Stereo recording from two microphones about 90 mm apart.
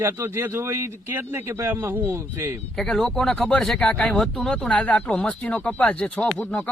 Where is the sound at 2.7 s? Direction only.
5° left (ahead or behind).